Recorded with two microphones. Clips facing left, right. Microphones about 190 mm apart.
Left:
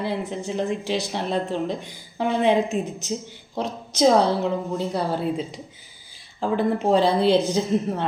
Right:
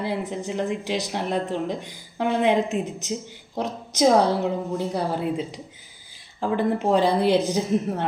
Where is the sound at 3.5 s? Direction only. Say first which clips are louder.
Even; 15° right (ahead or behind).